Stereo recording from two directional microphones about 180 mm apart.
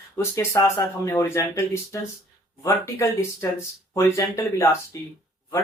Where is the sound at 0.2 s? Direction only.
15° left (ahead or behind).